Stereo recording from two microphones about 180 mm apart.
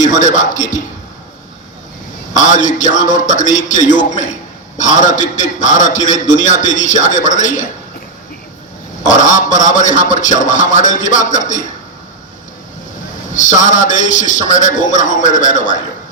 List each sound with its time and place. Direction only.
0.0 s a man's voice: 45° left (ahead or behind)
2.3 s a man's voice: 45° left (ahead or behind)
9.0 s a man's voice: 45° left (ahead or behind)
13.3 s a man's voice: 45° left (ahead or behind)